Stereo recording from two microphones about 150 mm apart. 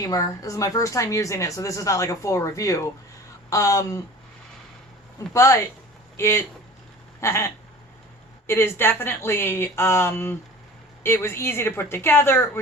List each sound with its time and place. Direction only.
0.0 s speech: 20° left (ahead or behind)
5.3 s speech: 20° left (ahead or behind)